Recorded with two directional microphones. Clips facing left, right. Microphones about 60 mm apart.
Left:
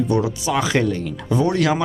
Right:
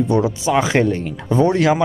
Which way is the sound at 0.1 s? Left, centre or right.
Right.